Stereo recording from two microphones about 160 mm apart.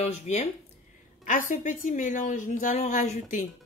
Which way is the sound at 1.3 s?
55° left (ahead or behind).